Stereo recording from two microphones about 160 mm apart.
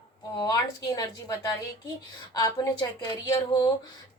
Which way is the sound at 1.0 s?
20° left (ahead or behind).